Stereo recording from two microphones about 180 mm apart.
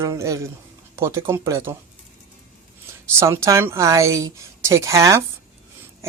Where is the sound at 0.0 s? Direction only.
15° right (ahead or behind).